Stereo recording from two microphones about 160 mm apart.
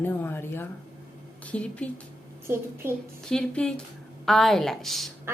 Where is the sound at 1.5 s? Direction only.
5° left (ahead or behind).